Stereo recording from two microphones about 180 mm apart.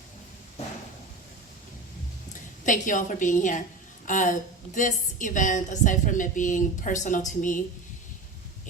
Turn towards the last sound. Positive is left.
turn(degrees=45)  # may be behind; listen again after turning